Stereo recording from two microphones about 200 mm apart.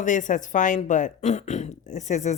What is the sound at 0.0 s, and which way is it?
Speech, 40° left (ahead or behind).